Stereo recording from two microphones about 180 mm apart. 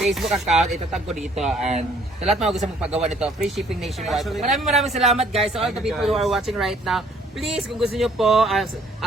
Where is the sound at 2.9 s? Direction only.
35° right (ahead or behind).